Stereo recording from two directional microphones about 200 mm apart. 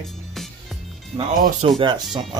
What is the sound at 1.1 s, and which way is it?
Speech, 25° right (ahead or behind).